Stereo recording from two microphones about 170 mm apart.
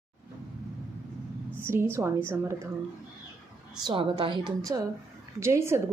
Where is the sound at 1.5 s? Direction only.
15° right (ahead or behind).